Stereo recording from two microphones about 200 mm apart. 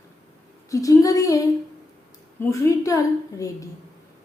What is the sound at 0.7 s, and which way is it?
Speech, 15° left (ahead or behind).